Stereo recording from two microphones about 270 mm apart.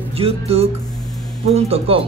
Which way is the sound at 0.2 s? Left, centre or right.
Right.